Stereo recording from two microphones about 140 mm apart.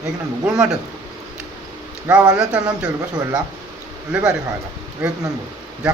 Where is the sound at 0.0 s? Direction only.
5° right (ahead or behind).